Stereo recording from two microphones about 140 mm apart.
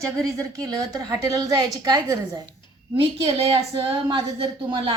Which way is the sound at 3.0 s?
45° right (ahead or behind).